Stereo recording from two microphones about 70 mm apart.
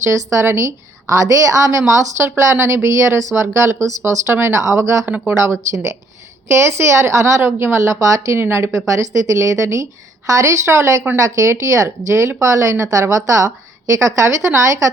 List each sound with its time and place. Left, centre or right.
0.0 s speech: right
5.0 s speech: right
5.4 s a woman's voice: right
8.4 s speech: right